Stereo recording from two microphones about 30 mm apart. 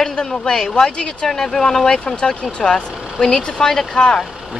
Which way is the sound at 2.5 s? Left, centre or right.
Left.